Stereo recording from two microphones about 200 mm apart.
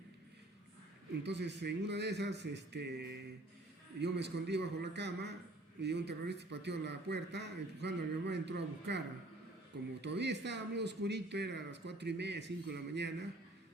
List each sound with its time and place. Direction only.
1.2 s a man's voice: 60° right (ahead or behind)
10.0 s a man's voice: 60° right (ahead or behind)